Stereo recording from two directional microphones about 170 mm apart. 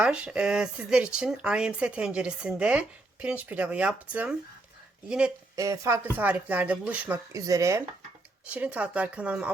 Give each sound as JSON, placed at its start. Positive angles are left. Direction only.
{"t": 0.0, "sound": "speech", "side_deg": -5}
{"t": 5.5, "sound": "speech", "side_deg": -20}
{"t": 7.3, "sound": "speech", "side_deg": -20}